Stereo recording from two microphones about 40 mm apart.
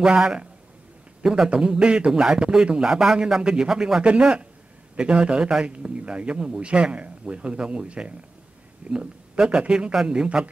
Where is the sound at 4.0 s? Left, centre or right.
Right.